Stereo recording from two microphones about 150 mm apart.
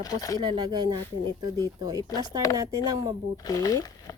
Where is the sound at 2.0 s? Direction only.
30° left (ahead or behind).